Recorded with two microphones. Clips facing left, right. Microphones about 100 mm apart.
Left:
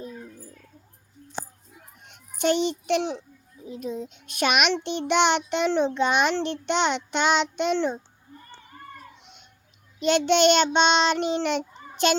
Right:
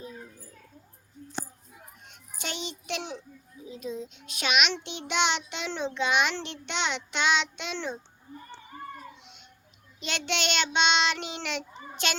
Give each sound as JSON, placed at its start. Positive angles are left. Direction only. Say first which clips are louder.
{"t": 2.4, "sound": "a child's voice", "louder": "left 14 dB", "side_deg": 55}
{"t": 3.7, "sound": "child singing", "louder": "left 4 dB", "side_deg": 50}
{"t": 10.0, "sound": "child singing", "louder": "left 12 dB", "side_deg": 45}